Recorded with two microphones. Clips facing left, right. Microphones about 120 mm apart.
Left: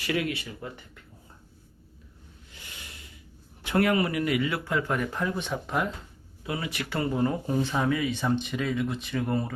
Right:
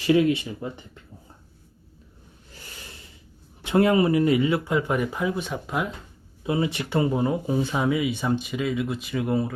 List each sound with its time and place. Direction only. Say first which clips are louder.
0.0 s speech: right 9 dB; 25° right (ahead or behind)
2.5 s a sound: right 3 dB; 40° right (ahead or behind)
3.6 s speech: right 5 dB; 25° right (ahead or behind); by 5.9 s 5° right (ahead or behind)
6.4 s speech: right 7 dB; 25° right (ahead or behind); by 9.5 s 5° right (ahead or behind)